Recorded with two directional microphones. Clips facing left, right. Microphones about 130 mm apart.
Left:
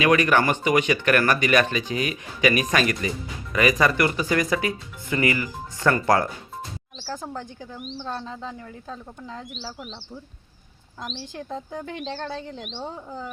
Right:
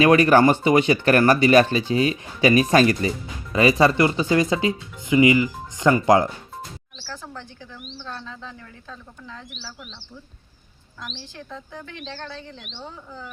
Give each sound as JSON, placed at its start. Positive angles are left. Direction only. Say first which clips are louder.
{"t": 0.0, "sound": "speech", "louder": "right 5 dB", "side_deg": -35}
{"t": 7.1, "sound": "speech", "louder": "left 4 dB", "side_deg": 45}
{"t": 11.0, "sound": "speech", "louder": "left 4 dB", "side_deg": 35}